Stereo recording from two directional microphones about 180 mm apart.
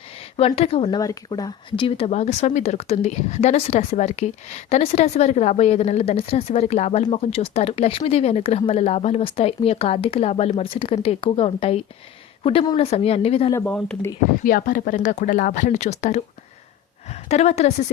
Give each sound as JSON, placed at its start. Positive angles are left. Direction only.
{"t": 0.2, "sound": "speech", "side_deg": 35}
{"t": 0.9, "sound": "speech", "side_deg": 20}
{"t": 13.7, "sound": "speech", "side_deg": 5}
{"t": 14.4, "sound": "speech", "side_deg": 50}